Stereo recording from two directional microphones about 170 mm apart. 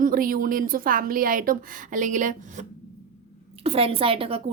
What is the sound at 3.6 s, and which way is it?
Speech, 35° right (ahead or behind).